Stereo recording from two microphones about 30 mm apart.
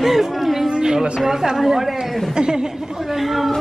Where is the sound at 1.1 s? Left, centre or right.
Centre.